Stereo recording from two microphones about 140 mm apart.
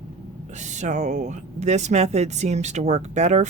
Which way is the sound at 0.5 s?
60° right (ahead or behind).